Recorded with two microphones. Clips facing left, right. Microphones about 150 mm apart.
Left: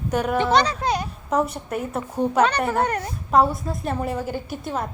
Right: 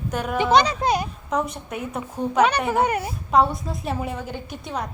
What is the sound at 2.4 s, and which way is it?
A woman's voice, 10° right (ahead or behind).